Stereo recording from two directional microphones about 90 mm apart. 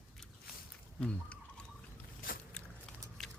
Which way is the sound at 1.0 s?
10° left (ahead or behind).